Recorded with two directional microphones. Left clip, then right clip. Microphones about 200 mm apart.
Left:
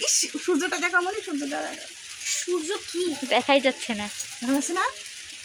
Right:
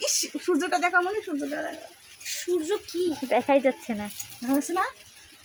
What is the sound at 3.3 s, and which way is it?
Speech, 5° right (ahead or behind).